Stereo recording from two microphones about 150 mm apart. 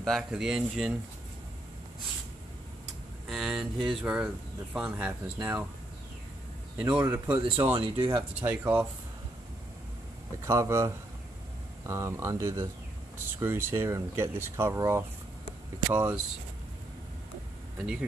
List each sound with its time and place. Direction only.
0.0 s speech: centre (ahead or behind)
3.3 s speech: 5° right (ahead or behind)
6.8 s speech: 10° right (ahead or behind)
7.7 s speech: 35° right (ahead or behind)
8.5 s speech: 10° right (ahead or behind)
10.4 s speech: 20° right (ahead or behind)